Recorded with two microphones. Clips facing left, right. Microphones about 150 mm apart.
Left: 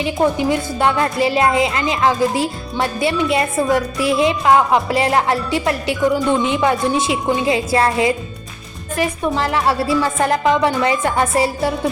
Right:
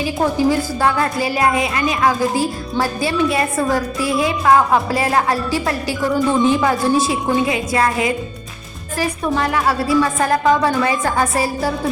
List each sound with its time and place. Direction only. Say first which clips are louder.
0.0 s speech: even; 20° left (ahead or behind)